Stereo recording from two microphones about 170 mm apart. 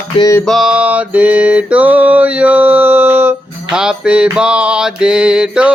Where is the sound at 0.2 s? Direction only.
20° left (ahead or behind).